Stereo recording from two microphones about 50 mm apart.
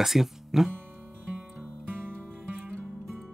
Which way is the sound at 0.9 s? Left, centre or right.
Right.